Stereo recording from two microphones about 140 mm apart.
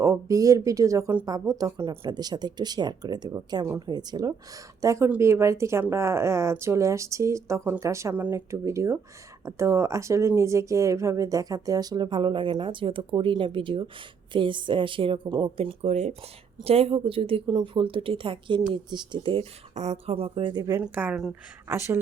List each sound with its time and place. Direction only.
0.0 s speech: 20° right (ahead or behind)
19.7 s speech: 50° right (ahead or behind); by 20.8 s 25° right (ahead or behind)
20.8 s speech: 10° right (ahead or behind)
21.7 s speech: 20° right (ahead or behind)